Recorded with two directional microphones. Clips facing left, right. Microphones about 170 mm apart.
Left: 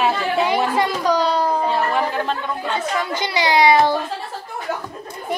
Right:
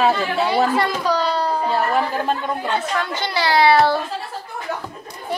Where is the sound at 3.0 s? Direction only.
10° left (ahead or behind).